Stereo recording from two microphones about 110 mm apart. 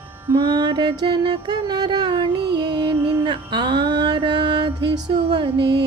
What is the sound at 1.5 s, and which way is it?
Music, 40° right (ahead or behind).